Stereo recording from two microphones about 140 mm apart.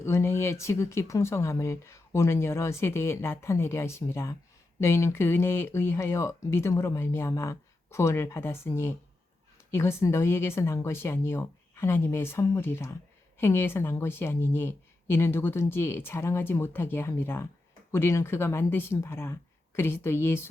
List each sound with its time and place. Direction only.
0.0 s speech: 20° left (ahead or behind)